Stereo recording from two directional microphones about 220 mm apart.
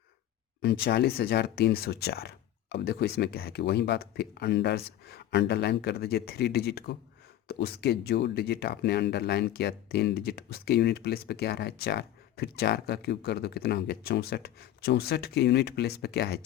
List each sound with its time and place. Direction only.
0.6 s speech: 45° left (ahead or behind)